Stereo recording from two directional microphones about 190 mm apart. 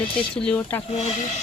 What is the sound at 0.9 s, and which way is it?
Speech, 35° left (ahead or behind).